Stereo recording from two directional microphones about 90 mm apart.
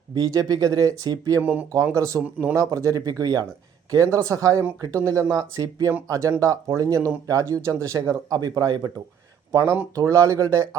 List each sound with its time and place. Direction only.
0.1 s speech: 45° right (ahead or behind)
1.4 s speech: 20° right (ahead or behind)
1.9 s speech: 35° right (ahead or behind)
9.5 s speech: 35° right (ahead or behind)